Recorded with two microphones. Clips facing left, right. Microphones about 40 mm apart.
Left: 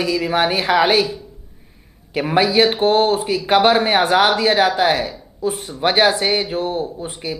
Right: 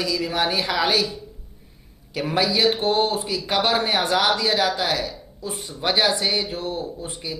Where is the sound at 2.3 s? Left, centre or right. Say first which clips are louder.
Left 5 dB; left.